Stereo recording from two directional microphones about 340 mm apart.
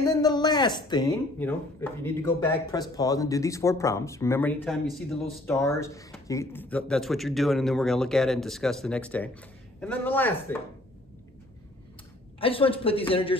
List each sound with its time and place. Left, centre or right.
0.2 s speech: centre
12.4 s speech: centre